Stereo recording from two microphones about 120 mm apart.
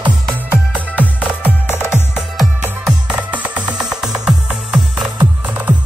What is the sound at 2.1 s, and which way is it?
Music, centre (ahead or behind).